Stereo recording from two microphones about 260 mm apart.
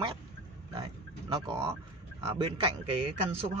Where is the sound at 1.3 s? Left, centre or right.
Centre.